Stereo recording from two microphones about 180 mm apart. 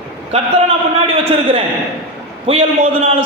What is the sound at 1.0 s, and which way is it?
A man's voice, 35° right (ahead or behind).